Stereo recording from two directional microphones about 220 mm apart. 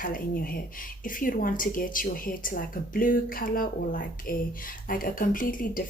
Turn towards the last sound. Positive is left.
turn(degrees=40)  # may be behind; listen again after turning